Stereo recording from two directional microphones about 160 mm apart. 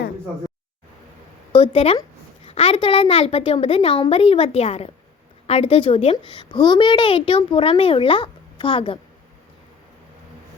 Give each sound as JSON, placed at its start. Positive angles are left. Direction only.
{"t": 1.5, "sound": "a woman's voice", "side_deg": 35}